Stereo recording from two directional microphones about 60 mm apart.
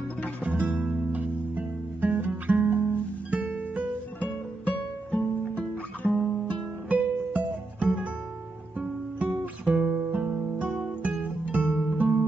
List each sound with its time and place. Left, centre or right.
0.4 s music: right
4.2 s music: left
6.9 s music: right
8.7 s guitar: right
9.8 s guitar: centre
10.4 s guitar: right
10.9 s music: right